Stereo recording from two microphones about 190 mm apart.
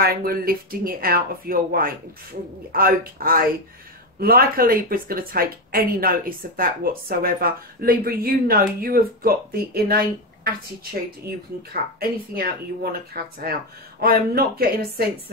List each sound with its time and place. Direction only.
0.0 s speech: 50° right (ahead or behind)